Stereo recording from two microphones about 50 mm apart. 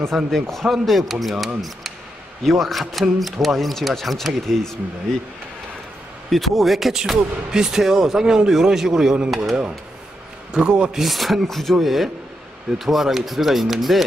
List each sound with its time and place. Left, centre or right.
0.1 s speech: centre
6.3 s speech: centre
10.5 s speech: centre
11.0 s speech: centre